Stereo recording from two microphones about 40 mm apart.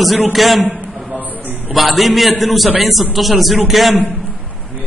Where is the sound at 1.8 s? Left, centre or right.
Centre.